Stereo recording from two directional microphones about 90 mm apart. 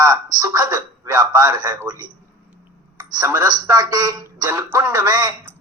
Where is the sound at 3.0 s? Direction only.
40° right (ahead or behind).